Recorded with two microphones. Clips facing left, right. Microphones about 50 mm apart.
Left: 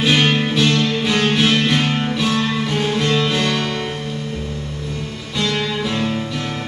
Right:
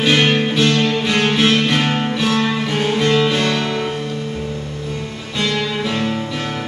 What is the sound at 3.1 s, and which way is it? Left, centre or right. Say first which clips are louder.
Music: right 5 dB; centre.